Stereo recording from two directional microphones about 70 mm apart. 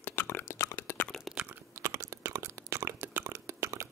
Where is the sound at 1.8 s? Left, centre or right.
Right.